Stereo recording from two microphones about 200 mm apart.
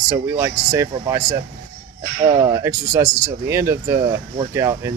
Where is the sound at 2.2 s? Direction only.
25° right (ahead or behind).